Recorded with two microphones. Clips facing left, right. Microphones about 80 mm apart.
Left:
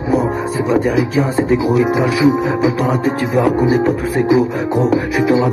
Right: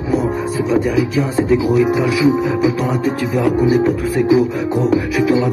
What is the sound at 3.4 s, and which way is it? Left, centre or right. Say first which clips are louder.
Music: even; left.